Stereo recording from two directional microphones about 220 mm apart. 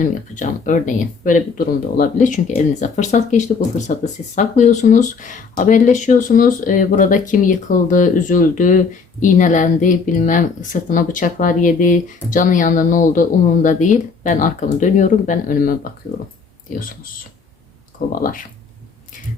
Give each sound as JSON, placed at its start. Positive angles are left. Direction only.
{"t": 0.0, "sound": "speech", "side_deg": 35}
{"t": 18.1, "sound": "speech", "side_deg": 40}